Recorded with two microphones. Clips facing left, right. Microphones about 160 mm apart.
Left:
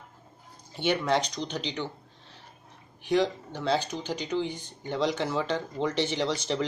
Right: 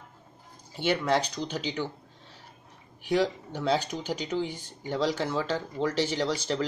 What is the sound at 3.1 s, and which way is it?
Speech, 5° right (ahead or behind).